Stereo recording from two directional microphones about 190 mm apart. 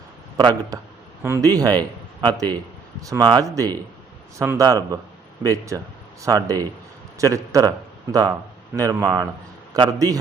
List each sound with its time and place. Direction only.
0.3 s a man's voice: 25° right (ahead or behind)
8.7 s a man's voice: 20° right (ahead or behind)